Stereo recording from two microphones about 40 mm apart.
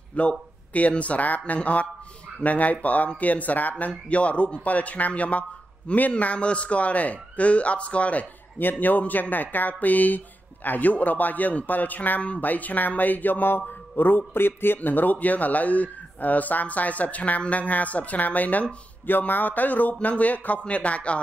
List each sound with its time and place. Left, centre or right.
0.2 s a man's voice: left
14.8 s a man's voice: left
19.0 s a man's voice: left